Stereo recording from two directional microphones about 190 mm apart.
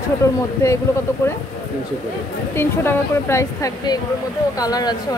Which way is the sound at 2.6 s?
10° left (ahead or behind).